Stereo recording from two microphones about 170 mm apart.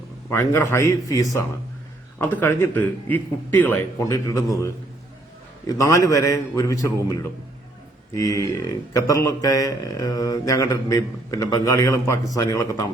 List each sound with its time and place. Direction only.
0.3 s a man's voice: 15° left (ahead or behind)